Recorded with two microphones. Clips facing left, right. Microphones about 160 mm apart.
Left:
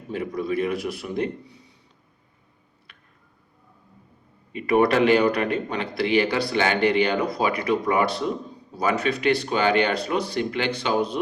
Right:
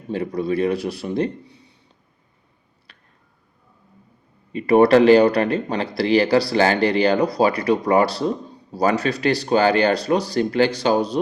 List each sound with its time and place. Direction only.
0.1 s speech: 30° right (ahead or behind)
2.9 s a sound: 35° right (ahead or behind)
4.5 s speech: 35° right (ahead or behind)